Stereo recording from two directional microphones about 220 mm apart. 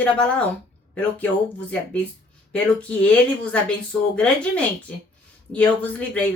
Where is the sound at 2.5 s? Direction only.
5° left (ahead or behind).